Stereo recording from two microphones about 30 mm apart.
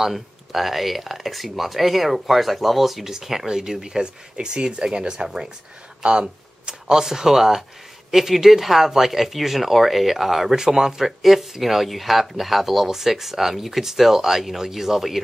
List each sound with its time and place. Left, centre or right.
0.0 s speech: centre
4.0 s speech: right
6.9 s speech: centre
10.5 s speech: centre